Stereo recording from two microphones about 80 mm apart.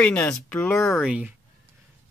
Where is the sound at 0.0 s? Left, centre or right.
Centre.